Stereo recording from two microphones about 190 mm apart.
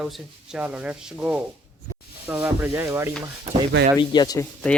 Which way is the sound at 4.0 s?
20° left (ahead or behind).